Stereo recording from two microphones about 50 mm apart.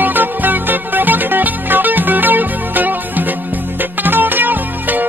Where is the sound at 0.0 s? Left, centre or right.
Right.